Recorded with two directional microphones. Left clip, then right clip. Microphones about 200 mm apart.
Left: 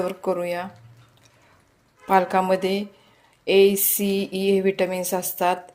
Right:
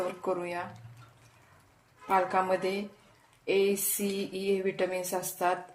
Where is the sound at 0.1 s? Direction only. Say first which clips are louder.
Left 8 dB; 40° left (ahead or behind).